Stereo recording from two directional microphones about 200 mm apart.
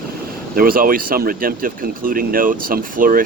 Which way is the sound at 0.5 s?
45° right (ahead or behind).